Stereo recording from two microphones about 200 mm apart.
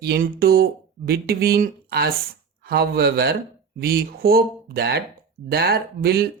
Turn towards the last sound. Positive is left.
turn(degrees=-55)  # may be behind; listen again after turning